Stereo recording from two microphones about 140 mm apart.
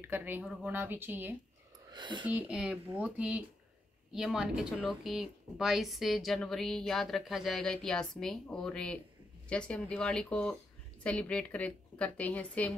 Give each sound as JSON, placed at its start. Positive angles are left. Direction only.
{"t": 0.0, "sound": "speech", "side_deg": -15}
{"t": 1.9, "sound": "speech", "side_deg": -35}
{"t": 2.2, "sound": "a woman's voice", "side_deg": -10}